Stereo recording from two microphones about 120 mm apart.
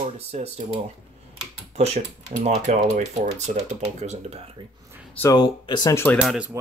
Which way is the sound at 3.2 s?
70° right (ahead or behind).